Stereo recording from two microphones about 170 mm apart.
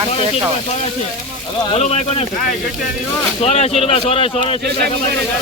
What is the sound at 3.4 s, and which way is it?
Speech, 40° left (ahead or behind).